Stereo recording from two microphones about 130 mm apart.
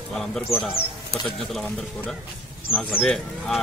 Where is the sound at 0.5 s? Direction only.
Centre (ahead or behind).